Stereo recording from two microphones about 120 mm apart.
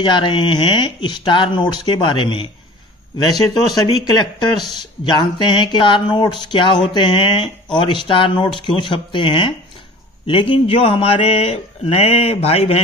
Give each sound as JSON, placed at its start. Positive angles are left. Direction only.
{"t": 0.0, "sound": "speech", "side_deg": 40}
{"t": 5.0, "sound": "speech", "side_deg": 40}